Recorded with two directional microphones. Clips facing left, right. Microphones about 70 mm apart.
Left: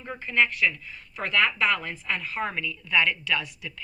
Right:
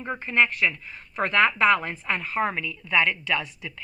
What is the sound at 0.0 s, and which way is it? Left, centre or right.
Speech, right.